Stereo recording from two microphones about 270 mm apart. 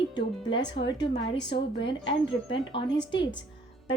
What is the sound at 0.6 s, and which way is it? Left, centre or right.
Speech, left.